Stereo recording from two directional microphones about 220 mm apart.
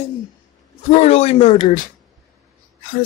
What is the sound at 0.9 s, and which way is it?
Speech, 30° left (ahead or behind).